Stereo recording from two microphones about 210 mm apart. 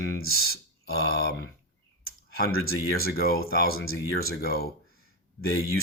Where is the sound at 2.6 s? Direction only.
45° left (ahead or behind).